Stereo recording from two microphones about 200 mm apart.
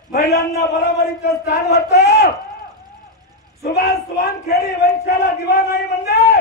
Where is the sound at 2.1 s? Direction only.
50° left (ahead or behind).